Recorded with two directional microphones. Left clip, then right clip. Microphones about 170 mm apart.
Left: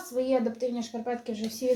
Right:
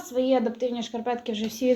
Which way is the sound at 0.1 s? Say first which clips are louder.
Right 3 dB; 35° right (ahead or behind).